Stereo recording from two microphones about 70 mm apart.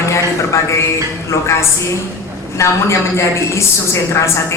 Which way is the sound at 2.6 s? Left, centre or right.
Left.